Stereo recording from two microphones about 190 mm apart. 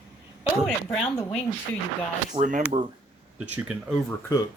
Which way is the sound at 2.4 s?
30° right (ahead or behind).